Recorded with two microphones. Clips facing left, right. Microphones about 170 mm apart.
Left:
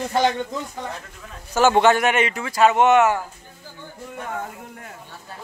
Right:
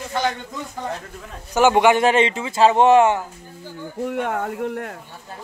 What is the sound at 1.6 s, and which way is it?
Speech, 15° right (ahead or behind).